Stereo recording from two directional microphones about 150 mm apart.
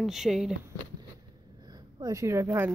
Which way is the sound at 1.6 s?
25° right (ahead or behind).